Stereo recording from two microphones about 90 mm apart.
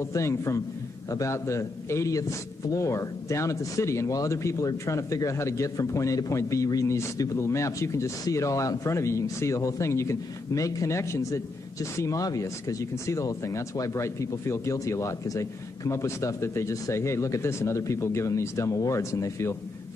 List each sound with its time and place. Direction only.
0.0 s a man's voice: 35° left (ahead or behind)